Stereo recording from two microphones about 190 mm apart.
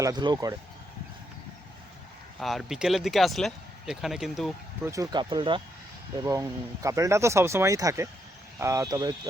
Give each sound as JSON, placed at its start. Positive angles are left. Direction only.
{"t": 0.0, "sound": "speech", "side_deg": -20}
{"t": 2.4, "sound": "speech", "side_deg": 0}
{"t": 4.8, "sound": "speech", "side_deg": -15}
{"t": 6.8, "sound": "speech", "side_deg": -15}